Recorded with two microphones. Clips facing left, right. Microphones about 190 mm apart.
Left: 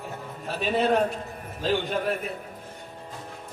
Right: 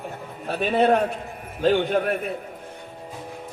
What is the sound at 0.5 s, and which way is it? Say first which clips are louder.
A man's voice: right 4 dB; 55° right (ahead or behind).